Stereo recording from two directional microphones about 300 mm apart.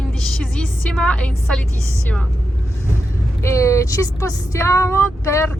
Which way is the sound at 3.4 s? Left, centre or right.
Centre.